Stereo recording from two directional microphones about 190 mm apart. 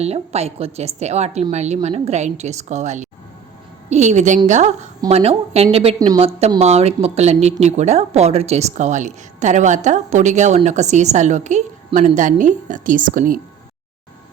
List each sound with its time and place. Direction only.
0.0 s a woman's voice: 35° right (ahead or behind)
6.0 s a woman's voice: 20° right (ahead or behind)
6.6 s a woman's voice: 35° right (ahead or behind)